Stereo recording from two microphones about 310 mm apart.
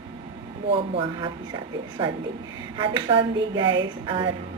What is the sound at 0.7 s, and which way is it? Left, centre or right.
A woman's voice, centre.